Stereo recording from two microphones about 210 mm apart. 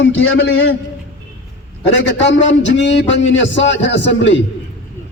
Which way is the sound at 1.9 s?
55° left (ahead or behind).